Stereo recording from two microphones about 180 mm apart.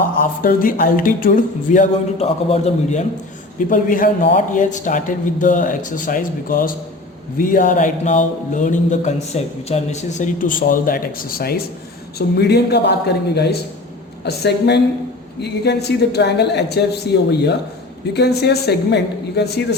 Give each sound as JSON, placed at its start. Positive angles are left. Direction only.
{"t": 0.2, "sound": "a man's voice", "side_deg": 50}